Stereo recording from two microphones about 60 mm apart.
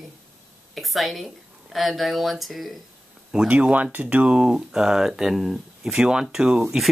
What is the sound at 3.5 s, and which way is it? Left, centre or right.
Speech, right.